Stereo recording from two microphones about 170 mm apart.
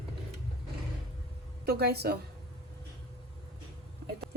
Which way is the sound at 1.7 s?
70° right (ahead or behind).